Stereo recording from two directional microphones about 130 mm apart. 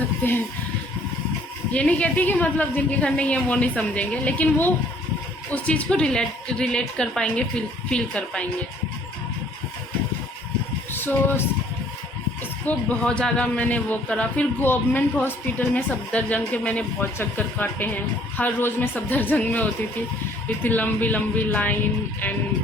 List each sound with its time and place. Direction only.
0.2 s speech: 15° left (ahead or behind)
1.7 s a man's voice: 10° left (ahead or behind)
10.9 s speech: 15° left (ahead or behind)
12.6 s a man's voice: 10° left (ahead or behind)
20.7 s a man's voice: 15° left (ahead or behind)